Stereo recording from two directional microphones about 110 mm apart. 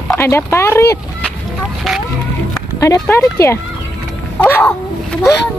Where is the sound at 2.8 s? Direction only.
30° left (ahead or behind).